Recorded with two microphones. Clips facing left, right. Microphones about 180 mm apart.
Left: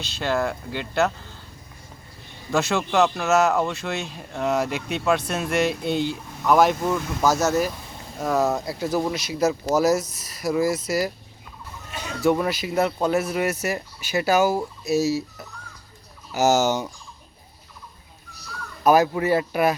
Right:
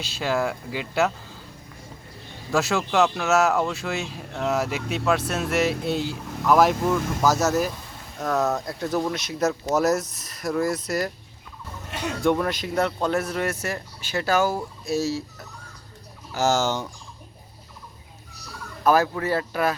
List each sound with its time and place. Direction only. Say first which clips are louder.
0.0 s speech: even; 5° right (ahead or behind)
2.5 s speech: left 1 dB; 5° right (ahead or behind)
12.2 s speech: left 2 dB; 5° left (ahead or behind)
16.3 s speech: left 3 dB; 15° left (ahead or behind)
18.8 s speech: left 3 dB; 15° left (ahead or behind)